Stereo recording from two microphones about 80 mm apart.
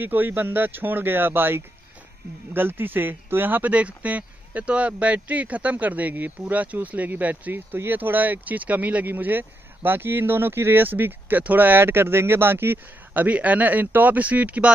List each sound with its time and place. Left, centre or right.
0.0 s speech: right